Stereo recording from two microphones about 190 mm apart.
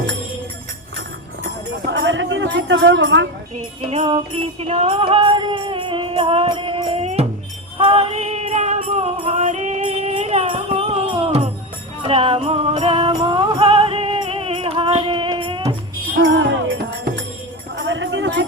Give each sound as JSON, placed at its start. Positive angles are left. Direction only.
{"t": 1.9, "sound": "music", "side_deg": -70}
{"t": 3.5, "sound": "music", "side_deg": -35}
{"t": 16.2, "sound": "music", "side_deg": -75}
{"t": 17.7, "sound": "music", "side_deg": -75}